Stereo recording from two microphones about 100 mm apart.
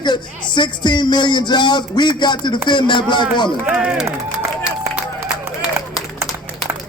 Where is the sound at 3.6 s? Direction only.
15° right (ahead or behind).